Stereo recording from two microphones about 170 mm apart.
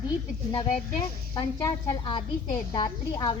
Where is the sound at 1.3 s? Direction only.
25° left (ahead or behind).